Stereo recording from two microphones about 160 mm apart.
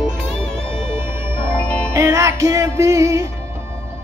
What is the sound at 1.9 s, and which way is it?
Music, 20° right (ahead or behind).